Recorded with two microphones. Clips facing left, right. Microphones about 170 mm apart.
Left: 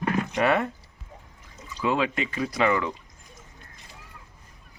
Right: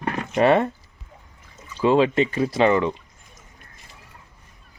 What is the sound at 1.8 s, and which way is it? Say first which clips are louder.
Speech: right 8 dB; 30° right (ahead or behind).